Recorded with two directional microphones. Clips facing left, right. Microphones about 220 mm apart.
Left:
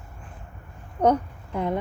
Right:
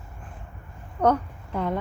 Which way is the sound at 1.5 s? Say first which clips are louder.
Left 1 dB; 15° left (ahead or behind).